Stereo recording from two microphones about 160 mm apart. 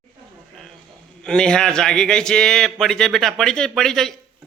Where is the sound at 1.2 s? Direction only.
5° left (ahead or behind).